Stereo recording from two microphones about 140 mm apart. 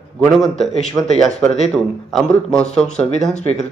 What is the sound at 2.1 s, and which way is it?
A man's voice, 5° left (ahead or behind).